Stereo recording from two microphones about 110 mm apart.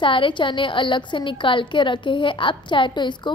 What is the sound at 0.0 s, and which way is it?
A woman's voice, 50° left (ahead or behind).